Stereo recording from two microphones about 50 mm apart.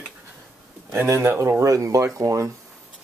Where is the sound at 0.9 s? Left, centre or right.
Right.